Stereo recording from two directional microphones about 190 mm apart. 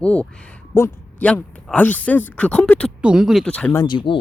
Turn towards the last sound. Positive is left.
turn(degrees=25)  # may be behind; listen again after turning